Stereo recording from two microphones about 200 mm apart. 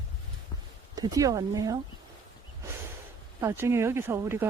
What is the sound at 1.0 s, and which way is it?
Speech, 20° right (ahead or behind).